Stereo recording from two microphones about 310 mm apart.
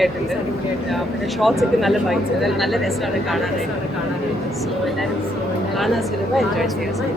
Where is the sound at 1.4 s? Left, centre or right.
Centre.